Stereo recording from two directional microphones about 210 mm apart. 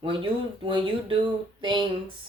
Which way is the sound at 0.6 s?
25° right (ahead or behind).